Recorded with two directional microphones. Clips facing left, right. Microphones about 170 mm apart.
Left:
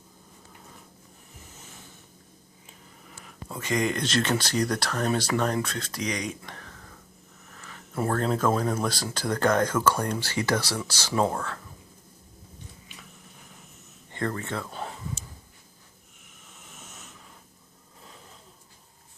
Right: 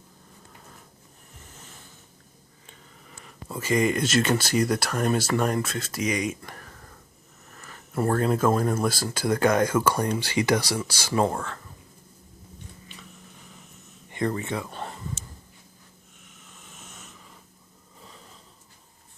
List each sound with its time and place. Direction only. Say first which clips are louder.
2.6 s speech: even; centre (ahead or behind)
11.2 s speech: right 1 dB; centre (ahead or behind)
14.1 s speech: right 3 dB; 15° right (ahead or behind)
14.7 s a sound: even; centre (ahead or behind)